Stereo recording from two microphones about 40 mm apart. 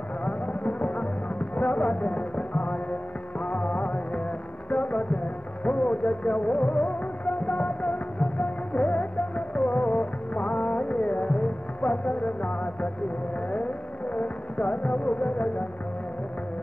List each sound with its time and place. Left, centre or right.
0.2 s music: left
14.1 s music: left